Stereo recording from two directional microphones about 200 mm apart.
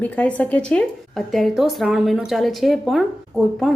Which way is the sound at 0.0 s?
10° left (ahead or behind).